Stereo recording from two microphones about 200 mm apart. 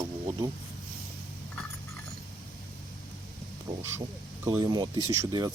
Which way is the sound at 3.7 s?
15° right (ahead or behind).